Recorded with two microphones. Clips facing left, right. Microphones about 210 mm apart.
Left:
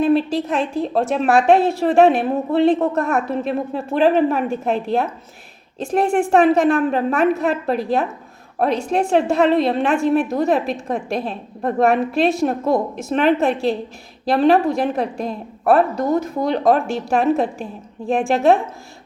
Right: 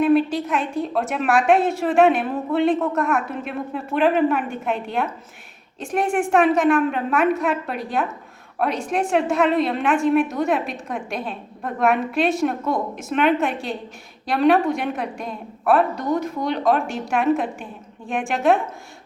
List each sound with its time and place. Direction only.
0.0 s a woman's voice: 30° left (ahead or behind)